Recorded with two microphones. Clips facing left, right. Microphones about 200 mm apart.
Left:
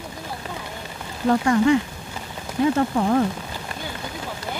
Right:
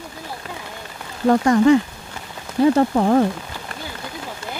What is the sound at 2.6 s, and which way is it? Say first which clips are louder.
Speech: right 4 dB; 35° right (ahead or behind).